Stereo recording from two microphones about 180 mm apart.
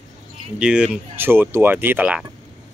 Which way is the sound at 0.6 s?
5° right (ahead or behind).